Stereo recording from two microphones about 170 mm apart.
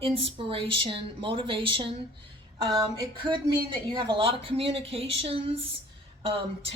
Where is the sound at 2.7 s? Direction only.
25° right (ahead or behind).